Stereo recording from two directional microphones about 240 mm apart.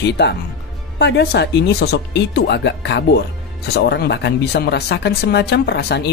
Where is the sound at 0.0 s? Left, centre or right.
Left.